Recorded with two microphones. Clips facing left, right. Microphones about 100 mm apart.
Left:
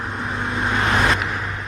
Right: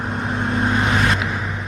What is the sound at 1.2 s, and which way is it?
Vehicle, 5° right (ahead or behind).